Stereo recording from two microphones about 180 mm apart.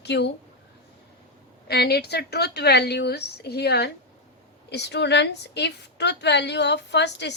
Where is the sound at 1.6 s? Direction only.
65° left (ahead or behind).